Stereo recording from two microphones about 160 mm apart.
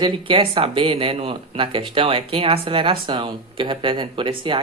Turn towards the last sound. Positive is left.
turn(degrees=-30)  # may be behind; listen again after turning